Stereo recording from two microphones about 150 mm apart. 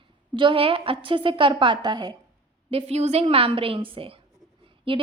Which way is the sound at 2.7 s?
40° right (ahead or behind).